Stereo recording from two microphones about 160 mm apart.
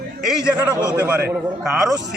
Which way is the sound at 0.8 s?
10° right (ahead or behind).